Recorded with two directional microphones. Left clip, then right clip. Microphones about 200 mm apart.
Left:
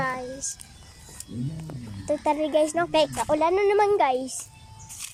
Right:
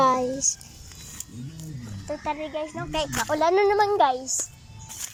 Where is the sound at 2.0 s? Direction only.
30° left (ahead or behind).